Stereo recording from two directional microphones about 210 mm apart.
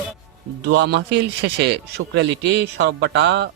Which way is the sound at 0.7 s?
50° right (ahead or behind).